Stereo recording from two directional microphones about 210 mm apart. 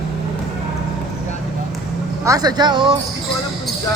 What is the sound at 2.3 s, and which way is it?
Speech, 20° right (ahead or behind).